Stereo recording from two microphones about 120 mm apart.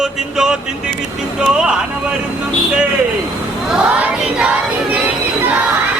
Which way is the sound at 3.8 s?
10° right (ahead or behind).